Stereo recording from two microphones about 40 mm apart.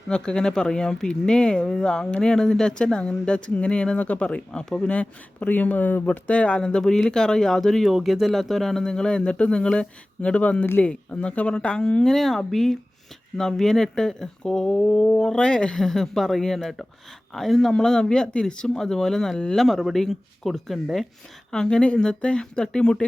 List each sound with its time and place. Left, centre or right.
0.1 s speech: left
3.9 s speech: left
4.3 s speech: left
6.2 s speech: left
6.6 s speech: centre
7.8 s speech: centre; by 12.0 s left
12.0 s speech: centre; by 15.8 s left
15.8 s speech: centre
18.8 s speech: centre
21.5 s speech: centre